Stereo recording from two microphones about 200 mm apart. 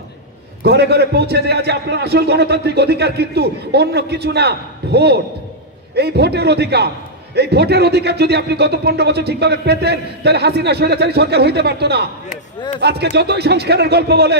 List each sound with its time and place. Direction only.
0.7 s speech: 55° right (ahead or behind)